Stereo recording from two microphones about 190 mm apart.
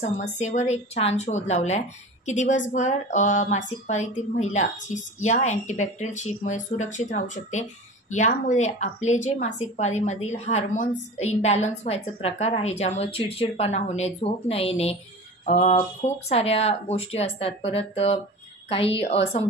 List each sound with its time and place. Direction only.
0.0 s a woman's voice: 35° left (ahead or behind)